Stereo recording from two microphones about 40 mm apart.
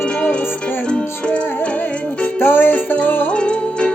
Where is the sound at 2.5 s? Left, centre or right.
Left.